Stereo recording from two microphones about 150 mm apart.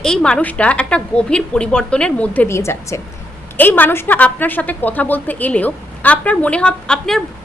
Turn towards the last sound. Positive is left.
turn(degrees=5)  # may be behind; listen again after turning